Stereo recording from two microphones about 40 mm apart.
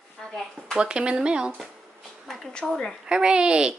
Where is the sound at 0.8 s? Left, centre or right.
Right.